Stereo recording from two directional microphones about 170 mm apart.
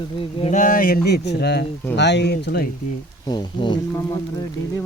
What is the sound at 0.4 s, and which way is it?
Speech, 45° left (ahead or behind).